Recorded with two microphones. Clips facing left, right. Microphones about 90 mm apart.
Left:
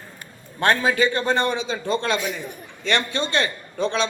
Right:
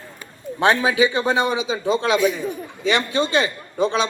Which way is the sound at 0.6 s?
15° right (ahead or behind).